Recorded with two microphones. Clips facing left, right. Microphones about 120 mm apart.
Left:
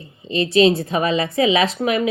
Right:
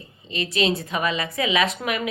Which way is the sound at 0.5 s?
35° left (ahead or behind).